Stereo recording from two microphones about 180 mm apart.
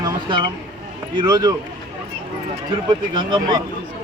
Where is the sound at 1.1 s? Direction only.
25° right (ahead or behind).